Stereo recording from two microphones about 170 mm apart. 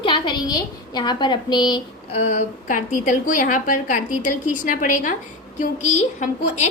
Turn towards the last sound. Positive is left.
turn(degrees=45)  # may be behind; listen again after turning